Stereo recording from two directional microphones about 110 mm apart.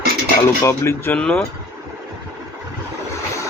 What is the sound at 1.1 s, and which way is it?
Speech, 5° left (ahead or behind).